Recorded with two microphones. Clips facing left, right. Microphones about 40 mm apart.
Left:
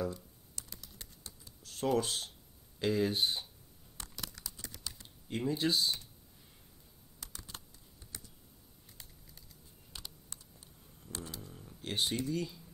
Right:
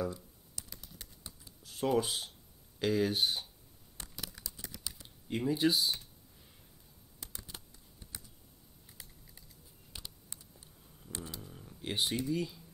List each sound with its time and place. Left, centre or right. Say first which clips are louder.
1.2 s computer keyboard: right 1 dB; right
1.7 s speech: right 1 dB; centre
4.0 s computer keyboard: even; centre
11.0 s a sound: even; centre
11.8 s speech: right 1 dB; centre